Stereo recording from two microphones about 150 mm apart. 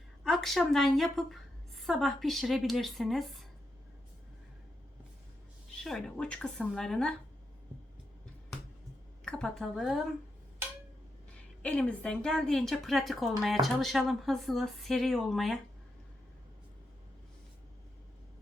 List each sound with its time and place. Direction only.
0.3 s a woman's voice: centre (ahead or behind)
5.7 s a woman's voice: centre (ahead or behind)
9.2 s a woman's voice: 5° left (ahead or behind)
11.6 s a woman's voice: 10° left (ahead or behind)